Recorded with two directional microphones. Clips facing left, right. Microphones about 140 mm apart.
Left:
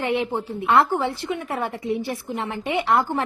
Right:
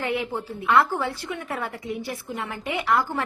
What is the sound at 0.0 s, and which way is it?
A woman's voice, 25° left (ahead or behind).